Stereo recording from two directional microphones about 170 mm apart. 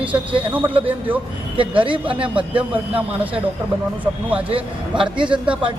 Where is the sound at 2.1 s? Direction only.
30° right (ahead or behind).